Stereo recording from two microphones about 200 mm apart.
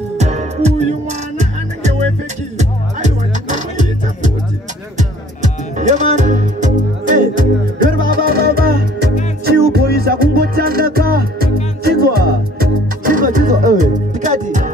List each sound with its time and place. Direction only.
0.2 s music: 35° right (ahead or behind)